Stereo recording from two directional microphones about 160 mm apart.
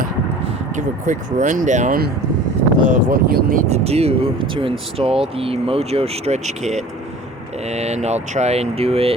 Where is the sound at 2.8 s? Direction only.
60° right (ahead or behind).